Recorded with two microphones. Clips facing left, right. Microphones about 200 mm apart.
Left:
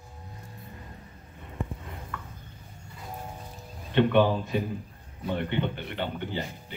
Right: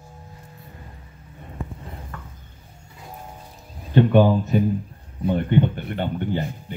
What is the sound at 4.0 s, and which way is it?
Speech, 40° right (ahead or behind).